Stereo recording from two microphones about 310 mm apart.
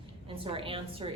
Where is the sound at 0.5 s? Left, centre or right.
Centre.